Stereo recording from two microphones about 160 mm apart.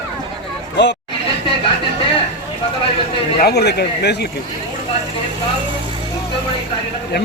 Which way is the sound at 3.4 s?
85° left.